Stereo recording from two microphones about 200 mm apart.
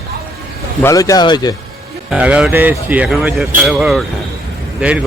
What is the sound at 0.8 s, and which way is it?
Speech, 15° left (ahead or behind).